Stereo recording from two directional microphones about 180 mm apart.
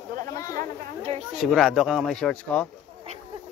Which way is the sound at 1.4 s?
Centre (ahead or behind).